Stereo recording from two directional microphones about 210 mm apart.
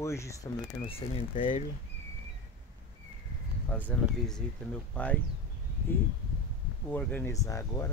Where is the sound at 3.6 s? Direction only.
5° left (ahead or behind).